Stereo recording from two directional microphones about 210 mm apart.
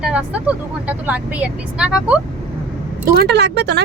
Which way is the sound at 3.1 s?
50° right (ahead or behind).